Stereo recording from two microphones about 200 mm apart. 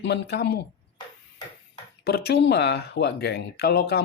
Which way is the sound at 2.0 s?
55° left (ahead or behind).